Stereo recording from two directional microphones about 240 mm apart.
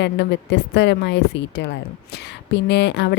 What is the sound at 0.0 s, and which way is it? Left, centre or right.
Music, left.